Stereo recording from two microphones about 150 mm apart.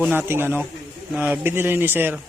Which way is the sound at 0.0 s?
15° right (ahead or behind).